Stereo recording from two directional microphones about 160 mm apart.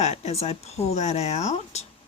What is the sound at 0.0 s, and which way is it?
Speech, 40° left (ahead or behind).